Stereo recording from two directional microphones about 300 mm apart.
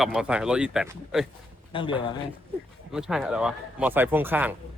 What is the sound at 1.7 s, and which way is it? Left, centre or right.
Speech, centre.